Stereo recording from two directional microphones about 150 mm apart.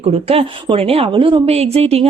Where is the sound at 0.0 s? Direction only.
40° right (ahead or behind).